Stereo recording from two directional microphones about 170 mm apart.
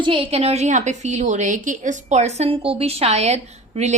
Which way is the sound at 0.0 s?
30° right (ahead or behind).